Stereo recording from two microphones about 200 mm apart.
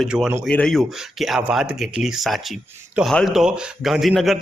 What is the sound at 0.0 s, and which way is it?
A man's voice, centre (ahead or behind).